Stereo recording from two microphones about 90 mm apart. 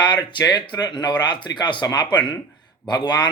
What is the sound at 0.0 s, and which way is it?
Speech, 55° left (ahead or behind).